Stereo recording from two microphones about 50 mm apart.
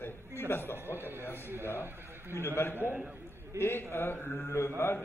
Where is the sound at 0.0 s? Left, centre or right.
Left.